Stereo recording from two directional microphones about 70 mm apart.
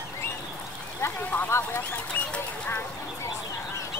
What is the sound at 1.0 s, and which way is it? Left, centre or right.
Speech, left.